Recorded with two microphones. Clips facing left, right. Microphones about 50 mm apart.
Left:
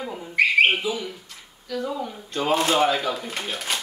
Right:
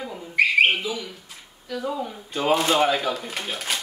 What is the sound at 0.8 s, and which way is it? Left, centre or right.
Speech, centre.